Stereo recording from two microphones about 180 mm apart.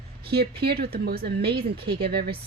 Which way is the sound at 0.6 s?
60° right (ahead or behind).